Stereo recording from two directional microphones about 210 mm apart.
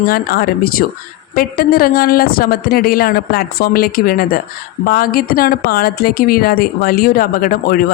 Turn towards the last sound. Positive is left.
turn(degrees=45)  # may be behind; listen again after turning